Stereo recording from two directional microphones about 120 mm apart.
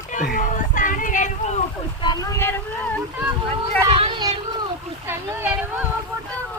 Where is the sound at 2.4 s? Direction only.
20° left (ahead or behind).